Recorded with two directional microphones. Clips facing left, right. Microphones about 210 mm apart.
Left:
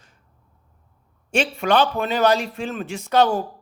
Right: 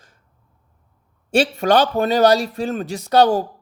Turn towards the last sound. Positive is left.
turn(degrees=-35)  # may be behind; listen again after turning